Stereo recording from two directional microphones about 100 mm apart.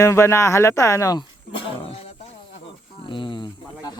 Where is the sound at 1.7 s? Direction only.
80° left.